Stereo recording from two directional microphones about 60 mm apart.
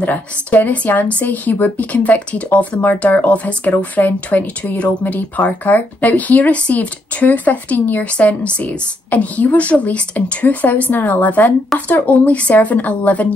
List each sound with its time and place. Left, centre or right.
0.0 s speech: left